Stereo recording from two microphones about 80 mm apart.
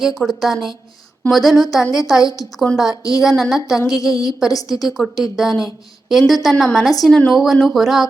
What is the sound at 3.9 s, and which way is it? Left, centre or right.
Speech, left.